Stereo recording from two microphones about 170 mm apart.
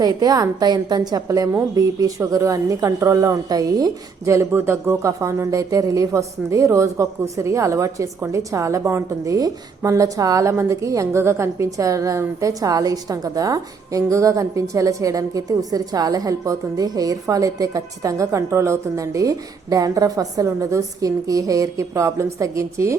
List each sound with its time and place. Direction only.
0.0 s speech: 20° right (ahead or behind)